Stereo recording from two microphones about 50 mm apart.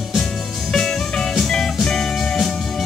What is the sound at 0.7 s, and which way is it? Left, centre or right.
Music, centre.